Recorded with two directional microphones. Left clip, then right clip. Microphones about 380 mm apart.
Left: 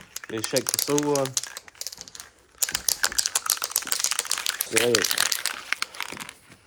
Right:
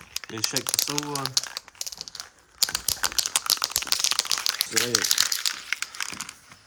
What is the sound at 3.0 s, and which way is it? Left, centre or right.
Typing, right.